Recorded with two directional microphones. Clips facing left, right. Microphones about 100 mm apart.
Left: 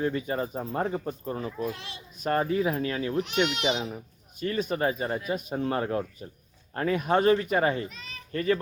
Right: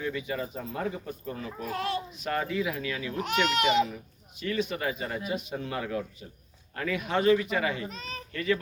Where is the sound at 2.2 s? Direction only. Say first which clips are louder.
Left 6 dB; 35° left (ahead or behind).